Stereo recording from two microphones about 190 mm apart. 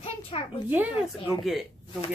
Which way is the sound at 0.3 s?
30° left (ahead or behind).